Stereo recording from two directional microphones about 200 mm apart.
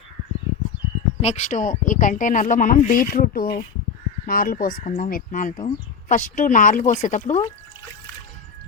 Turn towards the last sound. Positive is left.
turn(degrees=35)  # may be behind; listen again after turning